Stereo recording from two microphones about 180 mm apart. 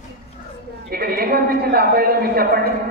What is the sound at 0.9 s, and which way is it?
A man's voice, 55° right (ahead or behind).